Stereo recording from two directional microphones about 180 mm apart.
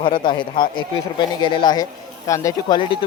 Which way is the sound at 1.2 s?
25° left (ahead or behind).